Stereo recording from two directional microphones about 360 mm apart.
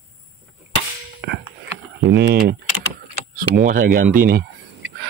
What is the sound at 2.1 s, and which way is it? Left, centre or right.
Speech, right.